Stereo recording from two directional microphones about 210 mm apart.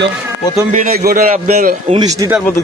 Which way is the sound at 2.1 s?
15° right (ahead or behind).